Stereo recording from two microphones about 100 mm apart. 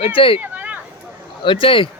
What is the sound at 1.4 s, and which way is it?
Speech, 60° left (ahead or behind).